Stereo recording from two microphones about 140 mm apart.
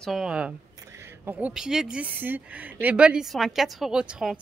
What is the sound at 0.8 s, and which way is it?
Speech, 20° right (ahead or behind).